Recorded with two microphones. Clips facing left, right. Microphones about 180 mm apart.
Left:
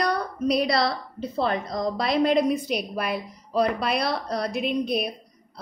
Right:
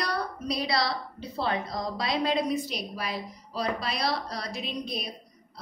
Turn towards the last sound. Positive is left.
turn(degrees=60)  # may be behind; listen again after turning